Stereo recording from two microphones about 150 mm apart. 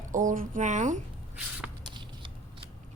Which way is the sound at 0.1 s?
60° right (ahead or behind).